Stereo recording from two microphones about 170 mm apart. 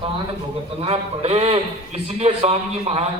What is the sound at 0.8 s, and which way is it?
A man's voice, 35° right (ahead or behind).